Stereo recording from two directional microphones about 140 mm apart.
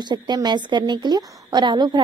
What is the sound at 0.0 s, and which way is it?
A woman's voice, 30° right (ahead or behind).